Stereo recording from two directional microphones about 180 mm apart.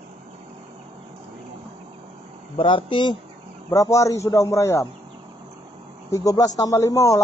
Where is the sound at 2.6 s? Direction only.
30° left (ahead or behind).